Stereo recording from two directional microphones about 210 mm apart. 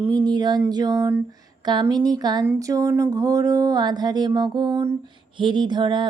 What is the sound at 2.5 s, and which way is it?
Speech, 15° right (ahead or behind).